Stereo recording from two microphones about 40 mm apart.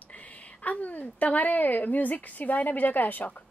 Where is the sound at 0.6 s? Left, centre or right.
Left.